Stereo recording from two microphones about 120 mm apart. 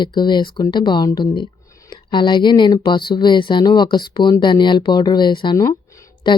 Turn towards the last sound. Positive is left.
turn(degrees=40)  # may be behind; listen again after turning